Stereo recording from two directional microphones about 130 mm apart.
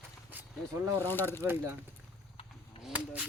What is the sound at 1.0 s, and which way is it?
Speech, 15° left (ahead or behind).